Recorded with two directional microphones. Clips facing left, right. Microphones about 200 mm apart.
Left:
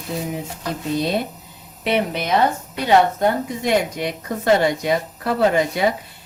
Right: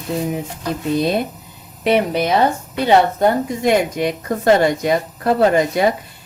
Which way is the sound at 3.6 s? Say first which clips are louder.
Right 4 dB; 50° right (ahead or behind).